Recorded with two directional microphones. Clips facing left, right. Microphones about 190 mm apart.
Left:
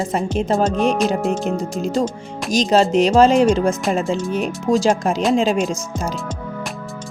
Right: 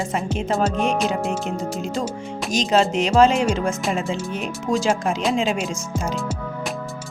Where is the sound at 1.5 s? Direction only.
40° left (ahead or behind).